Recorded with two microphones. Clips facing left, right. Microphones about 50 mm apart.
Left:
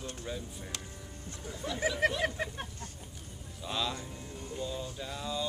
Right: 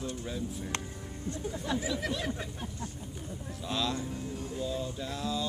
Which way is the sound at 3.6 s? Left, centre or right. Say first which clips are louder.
Right 2 dB; centre.